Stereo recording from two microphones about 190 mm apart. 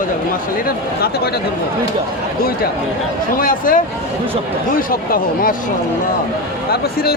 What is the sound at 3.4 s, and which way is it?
Speech, 45° left (ahead or behind).